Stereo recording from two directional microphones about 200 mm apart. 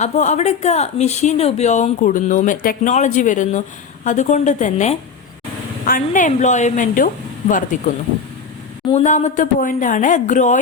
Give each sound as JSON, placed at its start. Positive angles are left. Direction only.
{"t": 0.0, "sound": "a woman's voice", "side_deg": 35}
{"t": 8.9, "sound": "a woman's voice", "side_deg": 35}